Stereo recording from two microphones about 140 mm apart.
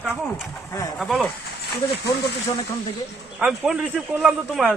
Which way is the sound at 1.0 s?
Centre (ahead or behind).